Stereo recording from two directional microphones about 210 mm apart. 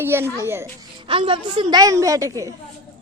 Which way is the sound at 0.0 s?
10° right (ahead or behind).